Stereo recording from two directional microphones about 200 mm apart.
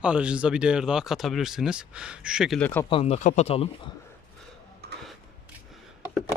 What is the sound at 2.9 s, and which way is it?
Speech, 30° left (ahead or behind).